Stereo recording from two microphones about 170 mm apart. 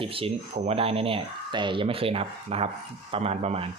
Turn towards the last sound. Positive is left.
turn(degrees=-35)  # may be behind; listen again after turning